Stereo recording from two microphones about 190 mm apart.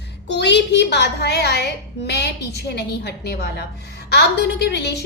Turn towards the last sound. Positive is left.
turn(degrees=60)  # may be behind; listen again after turning